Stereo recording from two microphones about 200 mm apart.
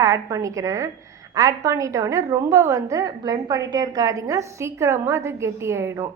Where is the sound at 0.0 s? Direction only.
15° right (ahead or behind).